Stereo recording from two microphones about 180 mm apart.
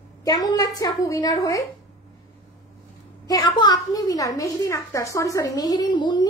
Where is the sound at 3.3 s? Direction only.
20° left (ahead or behind).